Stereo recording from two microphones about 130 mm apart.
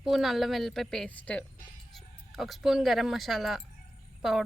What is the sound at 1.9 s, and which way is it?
Speech, centre (ahead or behind).